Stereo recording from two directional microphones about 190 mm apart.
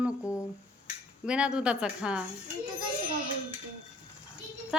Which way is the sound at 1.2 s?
5° right (ahead or behind).